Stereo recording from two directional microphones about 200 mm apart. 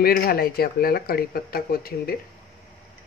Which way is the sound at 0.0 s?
50° left (ahead or behind).